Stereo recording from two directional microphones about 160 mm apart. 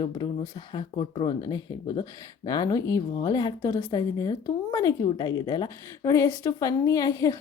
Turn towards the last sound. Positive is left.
turn(degrees=20)  # may be behind; listen again after turning